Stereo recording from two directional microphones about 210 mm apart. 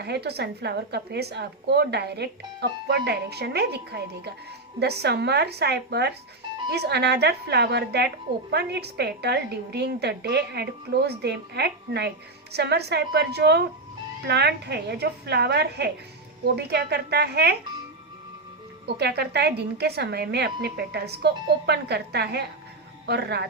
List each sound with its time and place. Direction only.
0.0 s a woman's voice: 50° right (ahead or behind)
18.9 s a woman's voice: 50° right (ahead or behind)